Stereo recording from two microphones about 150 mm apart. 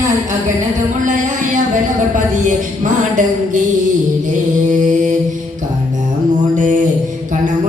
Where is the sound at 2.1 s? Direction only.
60° right (ahead or behind).